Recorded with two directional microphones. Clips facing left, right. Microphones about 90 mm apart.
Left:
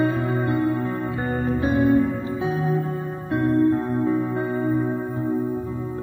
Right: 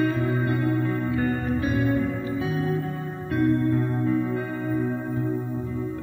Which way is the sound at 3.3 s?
25° left (ahead or behind).